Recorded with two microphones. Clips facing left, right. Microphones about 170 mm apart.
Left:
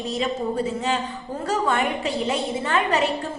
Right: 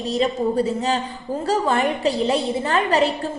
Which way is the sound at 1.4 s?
35° right (ahead or behind).